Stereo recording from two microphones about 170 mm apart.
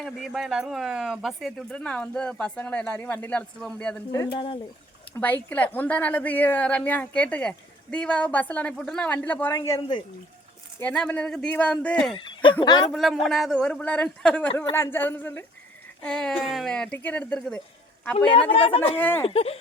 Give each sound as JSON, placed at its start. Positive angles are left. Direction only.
{"t": 0.0, "sound": "speech", "side_deg": 0}
{"t": 4.4, "sound": "speech", "side_deg": 30}
{"t": 5.1, "sound": "a woman's voice", "side_deg": 10}
{"t": 12.1, "sound": "speech", "side_deg": 30}
{"t": 12.9, "sound": "a woman's voice", "side_deg": 0}
{"t": 18.5, "sound": "speech", "side_deg": 35}
{"t": 18.9, "sound": "a woman's voice", "side_deg": 10}
{"t": 19.2, "sound": "speech", "side_deg": 35}